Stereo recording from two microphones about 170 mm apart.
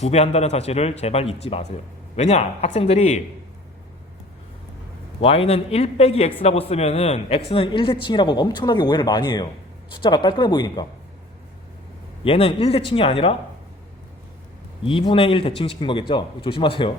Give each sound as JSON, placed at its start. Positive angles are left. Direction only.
{"t": 0.0, "sound": "a man's voice", "side_deg": 40}
{"t": 5.2, "sound": "a man's voice", "side_deg": 35}
{"t": 12.2, "sound": "a man's voice", "side_deg": 30}
{"t": 14.8, "sound": "a man's voice", "side_deg": 30}